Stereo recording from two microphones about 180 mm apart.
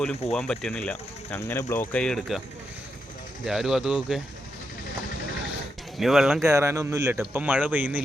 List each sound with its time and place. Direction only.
0.3 s speech: centre (ahead or behind)
1.4 s speech: 15° left (ahead or behind); by 2.4 s centre (ahead or behind)
3.4 s speech: centre (ahead or behind)
6.0 s speech: centre (ahead or behind)
6.5 s speech: 15° right (ahead or behind)